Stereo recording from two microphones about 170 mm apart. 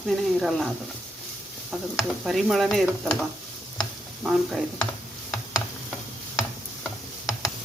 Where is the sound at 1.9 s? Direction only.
Centre (ahead or behind).